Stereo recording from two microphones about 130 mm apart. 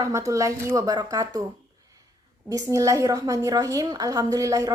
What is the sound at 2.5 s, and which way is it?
A woman's voice, 25° right (ahead or behind).